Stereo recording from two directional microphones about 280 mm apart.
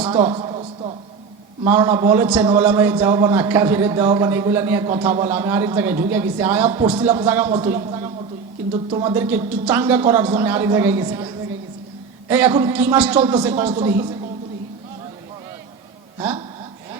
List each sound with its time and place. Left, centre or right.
0.2 s a sound: centre
1.6 s a man's voice: centre
12.3 s a man's voice: centre
16.1 s speech: centre